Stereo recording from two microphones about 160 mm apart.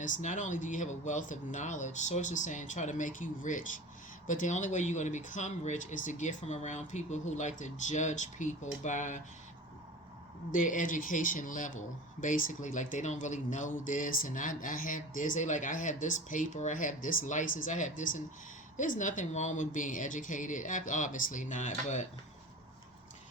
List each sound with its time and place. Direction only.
0.0 s speech: 50° left (ahead or behind)
10.5 s speech: 55° left (ahead or behind)